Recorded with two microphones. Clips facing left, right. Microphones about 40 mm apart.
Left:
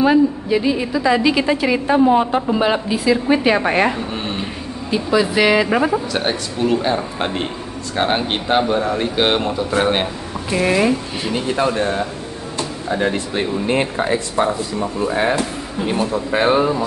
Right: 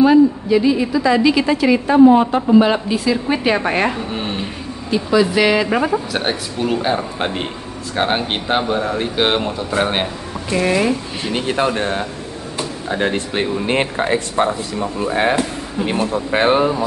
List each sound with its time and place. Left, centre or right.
0.0 s a woman's voice: centre
11.4 s speech: right
13.0 s speech: right
15.9 s speech: right